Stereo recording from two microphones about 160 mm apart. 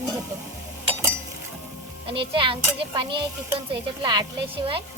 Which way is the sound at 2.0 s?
35° right (ahead or behind).